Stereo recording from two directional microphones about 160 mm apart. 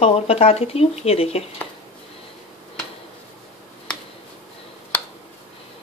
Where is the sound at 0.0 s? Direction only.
40° left (ahead or behind).